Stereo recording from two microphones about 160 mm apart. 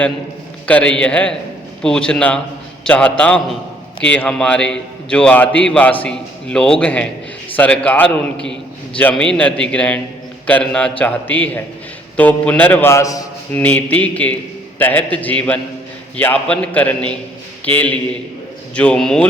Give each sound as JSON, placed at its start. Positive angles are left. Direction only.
{"t": 0.7, "sound": "a man's voice", "side_deg": 5}